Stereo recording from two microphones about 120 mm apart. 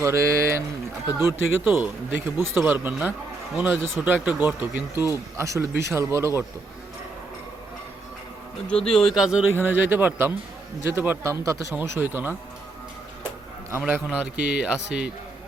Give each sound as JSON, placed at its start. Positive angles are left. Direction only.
{"t": 0.0, "sound": "a man's voice", "side_deg": -25}
{"t": 5.4, "sound": "a man's voice", "side_deg": -25}
{"t": 8.6, "sound": "a man's voice", "side_deg": 5}
{"t": 9.6, "sound": "a man's voice", "side_deg": -15}
{"t": 13.8, "sound": "speech", "side_deg": -10}